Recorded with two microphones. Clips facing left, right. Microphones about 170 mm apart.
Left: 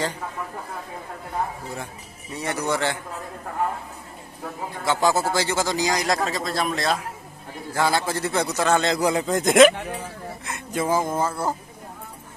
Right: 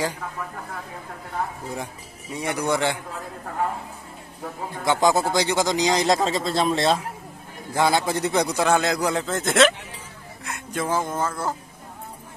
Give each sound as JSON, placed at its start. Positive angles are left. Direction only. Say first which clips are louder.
{"t": 2.3, "sound": "a man's voice", "louder": "right 1 dB", "side_deg": -10}
{"t": 4.8, "sound": "a man's voice", "louder": "right 1 dB", "side_deg": -15}
{"t": 8.8, "sound": "a man's voice", "louder": "left 2 dB", "side_deg": 5}
{"t": 10.4, "sound": "speech", "louder": "left 1 dB", "side_deg": 5}